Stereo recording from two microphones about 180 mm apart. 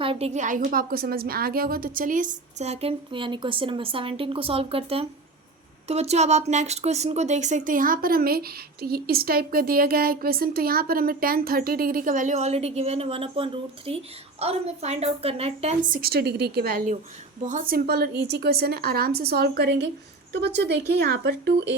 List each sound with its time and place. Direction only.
0.0 s a woman's voice: 30° right (ahead or behind); by 21.5 s 65° right (ahead or behind)